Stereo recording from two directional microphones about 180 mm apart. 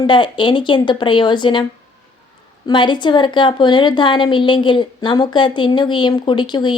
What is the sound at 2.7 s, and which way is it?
A woman's voice, 25° left (ahead or behind).